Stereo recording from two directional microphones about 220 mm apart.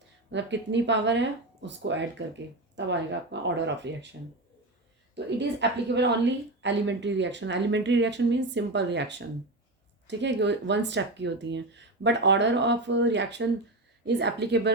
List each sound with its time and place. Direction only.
0.3 s a woman's voice: 55° right (ahead or behind)
5.1 s a woman's voice: 50° right (ahead or behind)